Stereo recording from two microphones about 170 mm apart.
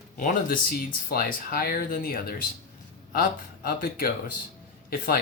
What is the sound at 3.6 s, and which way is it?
Speech, 60° left (ahead or behind).